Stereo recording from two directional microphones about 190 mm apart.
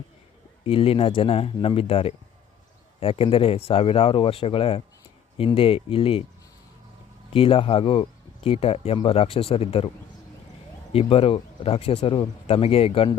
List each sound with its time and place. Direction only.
0.6 s speech: 30° left (ahead or behind)
7.3 s speech: 30° left (ahead or behind)
10.9 s speech: 30° left (ahead or behind)